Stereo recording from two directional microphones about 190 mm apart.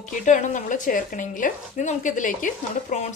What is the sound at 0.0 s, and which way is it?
A woman's voice, 40° left (ahead or behind).